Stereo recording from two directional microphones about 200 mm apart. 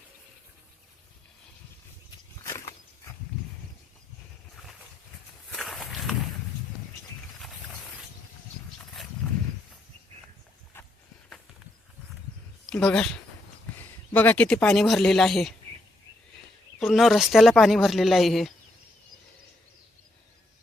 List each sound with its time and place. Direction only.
2.0 s a sound: 15° left (ahead or behind)
5.5 s walk: centre (ahead or behind)
12.7 s speech: 5° left (ahead or behind)
16.8 s speech: centre (ahead or behind)